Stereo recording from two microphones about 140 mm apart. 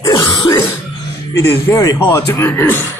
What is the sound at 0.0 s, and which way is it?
Throat clearing, 25° left (ahead or behind).